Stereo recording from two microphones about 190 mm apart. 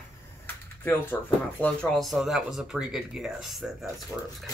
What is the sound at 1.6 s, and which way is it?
Speech, centre (ahead or behind).